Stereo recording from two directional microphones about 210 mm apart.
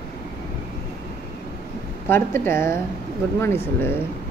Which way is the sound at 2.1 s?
10° left (ahead or behind).